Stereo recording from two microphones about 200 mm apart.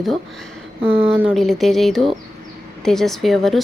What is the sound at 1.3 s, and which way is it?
A woman's voice, centre (ahead or behind).